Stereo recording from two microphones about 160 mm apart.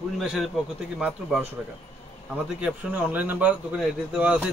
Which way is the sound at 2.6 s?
10° right (ahead or behind).